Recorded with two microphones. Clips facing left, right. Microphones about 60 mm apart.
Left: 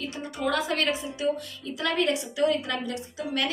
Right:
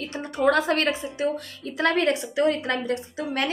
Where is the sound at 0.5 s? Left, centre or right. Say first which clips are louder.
Right 5 dB; right.